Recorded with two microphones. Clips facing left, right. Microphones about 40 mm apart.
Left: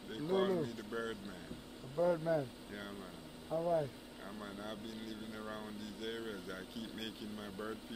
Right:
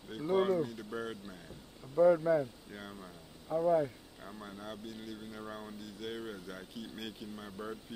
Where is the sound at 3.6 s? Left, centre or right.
Right.